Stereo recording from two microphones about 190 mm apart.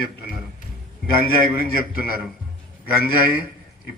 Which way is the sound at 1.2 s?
50° left (ahead or behind).